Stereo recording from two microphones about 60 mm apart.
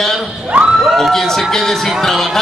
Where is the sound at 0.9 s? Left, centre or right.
Centre.